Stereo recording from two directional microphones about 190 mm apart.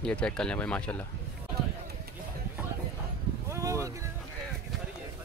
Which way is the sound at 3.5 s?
15° right (ahead or behind).